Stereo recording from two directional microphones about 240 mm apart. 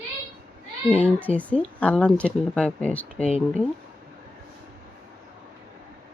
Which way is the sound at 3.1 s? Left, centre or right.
Left.